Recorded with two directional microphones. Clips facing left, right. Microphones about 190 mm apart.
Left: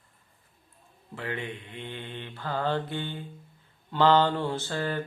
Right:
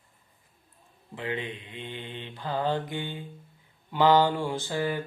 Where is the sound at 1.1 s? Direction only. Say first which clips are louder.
Right 1 dB; 20° right (ahead or behind).